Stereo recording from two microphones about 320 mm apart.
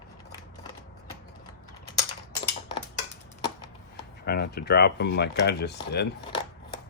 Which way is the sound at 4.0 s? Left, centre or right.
Left.